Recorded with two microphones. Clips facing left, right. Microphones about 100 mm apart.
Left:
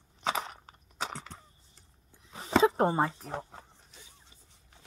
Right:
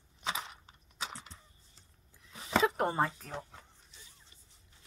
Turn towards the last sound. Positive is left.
turn(degrees=30)  # may be behind; listen again after turning